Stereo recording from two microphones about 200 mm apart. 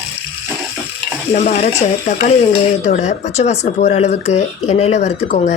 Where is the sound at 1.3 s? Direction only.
35° left (ahead or behind).